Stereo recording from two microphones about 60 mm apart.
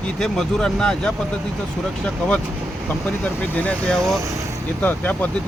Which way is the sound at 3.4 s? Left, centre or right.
Left.